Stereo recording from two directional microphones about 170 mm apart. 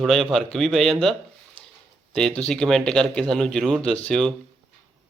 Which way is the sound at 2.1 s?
5° left (ahead or behind).